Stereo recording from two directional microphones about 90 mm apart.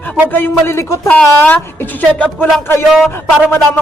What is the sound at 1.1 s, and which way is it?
Speech, 20° left (ahead or behind).